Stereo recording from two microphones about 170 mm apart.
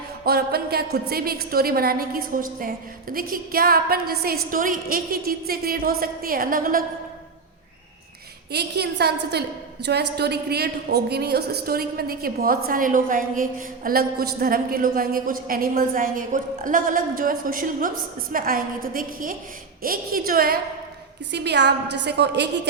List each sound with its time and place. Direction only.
0.3 s a woman's voice: 65° right (ahead or behind)
8.5 s a woman's voice: 70° right (ahead or behind)
21.3 s a woman's voice: 85° right